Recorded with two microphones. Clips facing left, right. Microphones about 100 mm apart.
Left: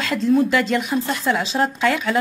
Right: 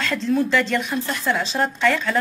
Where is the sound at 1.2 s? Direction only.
5° left (ahead or behind).